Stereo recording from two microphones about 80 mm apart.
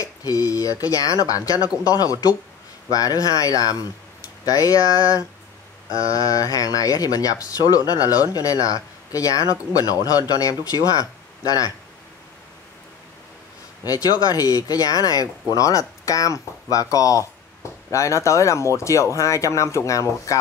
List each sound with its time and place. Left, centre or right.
0.0 s speech: left
13.8 s speech: left